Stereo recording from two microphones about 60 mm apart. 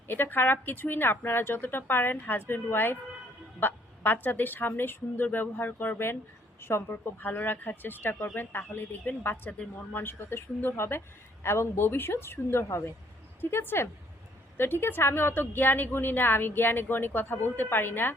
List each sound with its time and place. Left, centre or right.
0.1 s a woman's voice: left
13.4 s a woman's voice: left